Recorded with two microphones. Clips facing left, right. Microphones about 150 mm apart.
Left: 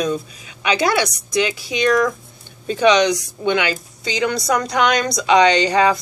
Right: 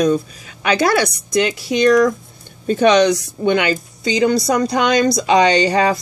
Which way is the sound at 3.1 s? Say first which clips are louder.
Right 3 dB; 40° right (ahead or behind).